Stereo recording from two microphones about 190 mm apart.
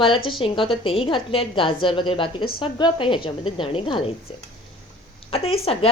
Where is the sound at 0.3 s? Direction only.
25° left (ahead or behind).